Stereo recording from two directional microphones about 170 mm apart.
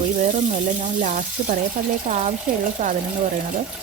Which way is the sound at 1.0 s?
50° right (ahead or behind).